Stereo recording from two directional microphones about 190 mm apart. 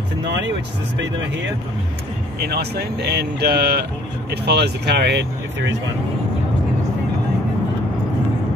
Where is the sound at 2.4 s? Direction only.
55° right (ahead or behind).